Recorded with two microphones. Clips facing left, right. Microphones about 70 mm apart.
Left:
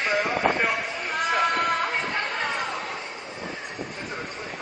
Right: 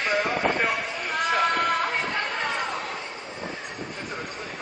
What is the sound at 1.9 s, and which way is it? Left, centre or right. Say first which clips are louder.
Chatter: even; left.